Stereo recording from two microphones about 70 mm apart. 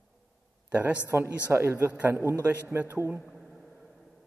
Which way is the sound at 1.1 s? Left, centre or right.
Right.